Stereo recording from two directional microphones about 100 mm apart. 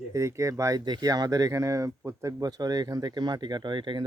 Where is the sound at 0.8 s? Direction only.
45° right (ahead or behind).